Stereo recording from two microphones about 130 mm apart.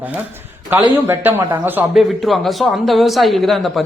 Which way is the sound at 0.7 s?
15° right (ahead or behind).